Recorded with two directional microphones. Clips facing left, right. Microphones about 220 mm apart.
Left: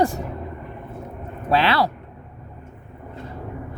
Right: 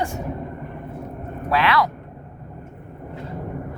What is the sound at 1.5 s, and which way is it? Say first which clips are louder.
Speech: left 1 dB; 30° left (ahead or behind).